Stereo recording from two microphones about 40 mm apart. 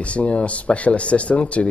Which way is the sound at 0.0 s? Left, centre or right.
Left.